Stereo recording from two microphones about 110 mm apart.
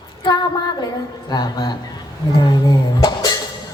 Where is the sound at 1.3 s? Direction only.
40° left (ahead or behind).